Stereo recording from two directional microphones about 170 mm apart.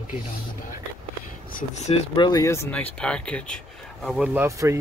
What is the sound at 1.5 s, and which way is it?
Speech, 55° left (ahead or behind).